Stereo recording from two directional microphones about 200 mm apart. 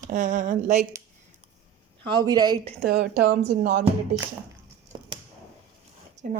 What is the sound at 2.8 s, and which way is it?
Speech, 55° right (ahead or behind).